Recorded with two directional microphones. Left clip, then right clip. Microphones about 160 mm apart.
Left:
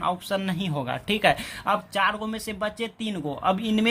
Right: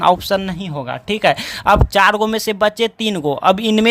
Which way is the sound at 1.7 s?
50° right (ahead or behind).